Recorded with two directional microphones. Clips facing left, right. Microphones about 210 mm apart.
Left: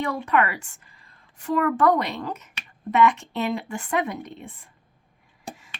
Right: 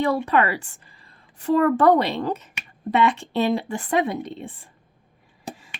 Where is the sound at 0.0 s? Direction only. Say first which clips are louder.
Right 3 dB; 35° right (ahead or behind).